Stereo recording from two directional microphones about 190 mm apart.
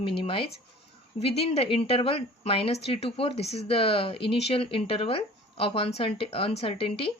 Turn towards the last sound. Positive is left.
turn(degrees=30)  # may be behind; listen again after turning